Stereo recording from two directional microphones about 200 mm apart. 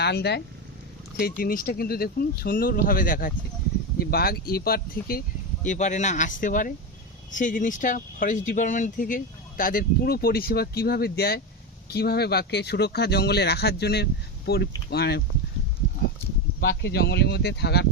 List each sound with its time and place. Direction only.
0.0 s speech: 55° left (ahead or behind)
5.6 s speech: 35° left (ahead or behind); by 15.2 s 55° left (ahead or behind)
16.6 s speech: 55° left (ahead or behind)